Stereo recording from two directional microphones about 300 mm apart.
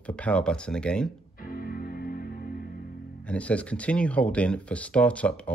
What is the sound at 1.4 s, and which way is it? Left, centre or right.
Music, left.